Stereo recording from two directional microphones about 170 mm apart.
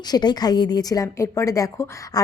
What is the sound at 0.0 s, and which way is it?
A woman's voice, 25° left (ahead or behind).